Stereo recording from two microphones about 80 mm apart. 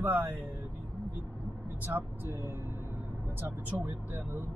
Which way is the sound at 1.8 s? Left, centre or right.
Right.